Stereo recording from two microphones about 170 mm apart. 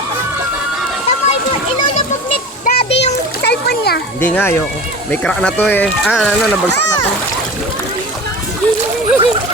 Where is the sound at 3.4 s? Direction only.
75° left (ahead or behind).